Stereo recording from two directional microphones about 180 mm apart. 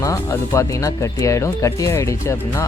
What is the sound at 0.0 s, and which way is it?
Speech, 15° left (ahead or behind).